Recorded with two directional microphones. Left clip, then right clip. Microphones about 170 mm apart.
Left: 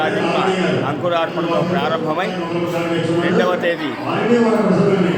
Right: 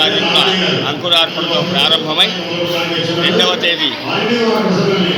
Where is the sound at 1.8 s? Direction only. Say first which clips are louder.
Right 7 dB; 5° left (ahead or behind).